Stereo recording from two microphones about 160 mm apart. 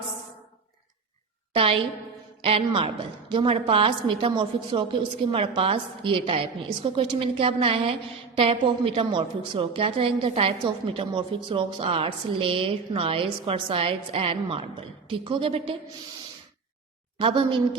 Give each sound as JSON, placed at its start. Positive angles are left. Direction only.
{"t": 2.4, "sound": "a woman's voice", "side_deg": -35}
{"t": 17.2, "sound": "a woman's voice", "side_deg": -35}